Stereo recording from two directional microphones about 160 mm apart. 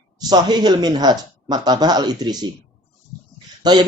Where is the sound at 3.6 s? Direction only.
25° right (ahead or behind).